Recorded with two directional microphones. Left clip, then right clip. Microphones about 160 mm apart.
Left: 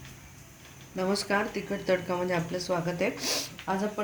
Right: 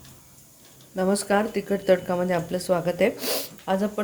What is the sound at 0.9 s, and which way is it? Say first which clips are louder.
Speech: right 5 dB; 40° right (ahead or behind).